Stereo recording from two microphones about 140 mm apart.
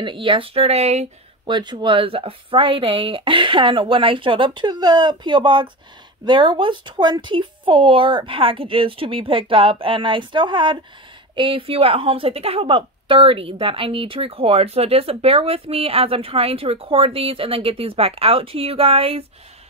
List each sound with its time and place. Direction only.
0.0 s speech: 40° right (ahead or behind)
1.4 s speech: 35° right (ahead or behind)